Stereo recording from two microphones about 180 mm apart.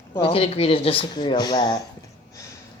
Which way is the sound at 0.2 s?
30° left (ahead or behind).